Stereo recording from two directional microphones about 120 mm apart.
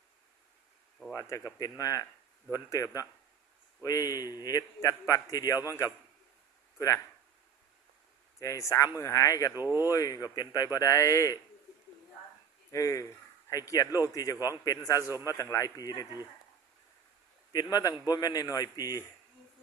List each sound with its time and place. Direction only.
1.1 s a man's voice: 30° left (ahead or behind)
8.4 s a man's voice: 25° left (ahead or behind)
9.6 s speech: 20° right (ahead or behind)
9.9 s a man's voice: 30° left (ahead or behind)
12.7 s a man's voice: 25° left (ahead or behind)
17.5 s a man's voice: 30° left (ahead or behind)